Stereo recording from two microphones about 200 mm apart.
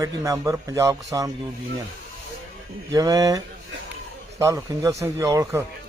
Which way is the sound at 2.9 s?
20° right (ahead or behind).